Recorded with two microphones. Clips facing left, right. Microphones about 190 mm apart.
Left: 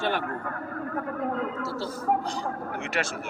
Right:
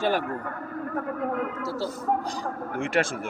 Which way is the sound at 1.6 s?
40° right (ahead or behind).